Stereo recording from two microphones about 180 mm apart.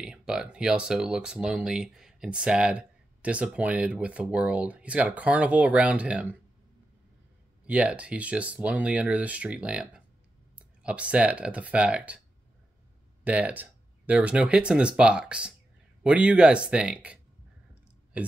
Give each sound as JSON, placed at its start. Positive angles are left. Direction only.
{"t": 0.0, "sound": "speech", "side_deg": -5}
{"t": 7.6, "sound": "speech", "side_deg": -5}
{"t": 13.2, "sound": "speech", "side_deg": -10}